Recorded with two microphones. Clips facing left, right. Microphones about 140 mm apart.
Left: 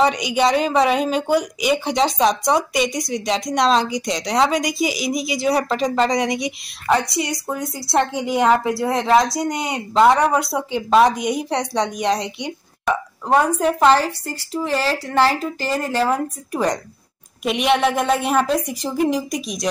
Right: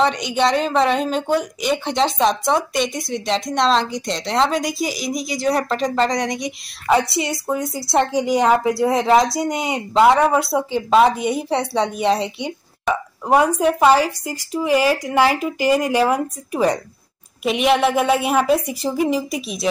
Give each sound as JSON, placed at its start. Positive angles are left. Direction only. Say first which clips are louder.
{"t": 0.0, "sound": "speech", "louder": "left 1 dB", "side_deg": 5}
{"t": 12.9, "sound": "a sound", "louder": "even", "side_deg": 0}
{"t": 13.2, "sound": "speech", "louder": "right 1 dB", "side_deg": -10}